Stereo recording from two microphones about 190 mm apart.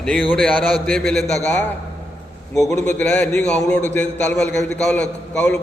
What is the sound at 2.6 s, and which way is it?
A man's voice, 15° left (ahead or behind).